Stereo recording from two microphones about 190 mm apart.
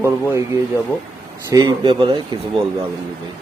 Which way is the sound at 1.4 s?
20° right (ahead or behind).